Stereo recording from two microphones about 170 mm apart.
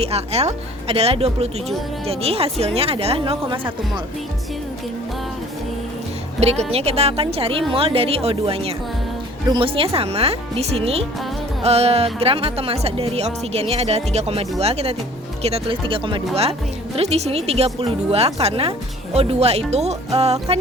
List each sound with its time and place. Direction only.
0.0 s speech: 40° right (ahead or behind)
6.4 s speech: 40° right (ahead or behind)